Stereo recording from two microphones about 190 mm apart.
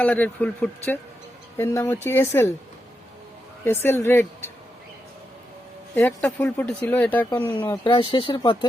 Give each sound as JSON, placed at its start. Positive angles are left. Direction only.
{"t": 0.0, "sound": "speech", "side_deg": 10}
{"t": 3.6, "sound": "speech", "side_deg": 10}
{"t": 5.9, "sound": "speech", "side_deg": 10}
{"t": 7.9, "sound": "speech", "side_deg": 30}